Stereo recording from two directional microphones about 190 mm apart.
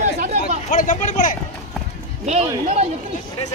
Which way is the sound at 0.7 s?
45° left (ahead or behind).